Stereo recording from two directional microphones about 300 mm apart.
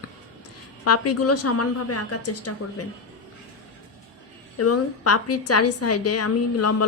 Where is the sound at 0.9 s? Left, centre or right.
Left.